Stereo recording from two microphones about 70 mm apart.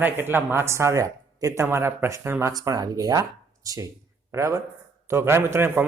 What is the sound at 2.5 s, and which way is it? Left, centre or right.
Speech, right.